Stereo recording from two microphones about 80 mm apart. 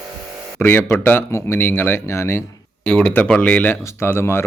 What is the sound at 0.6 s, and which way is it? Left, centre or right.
Speech, left.